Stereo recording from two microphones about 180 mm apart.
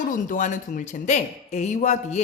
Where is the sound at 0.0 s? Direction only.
45° left (ahead or behind).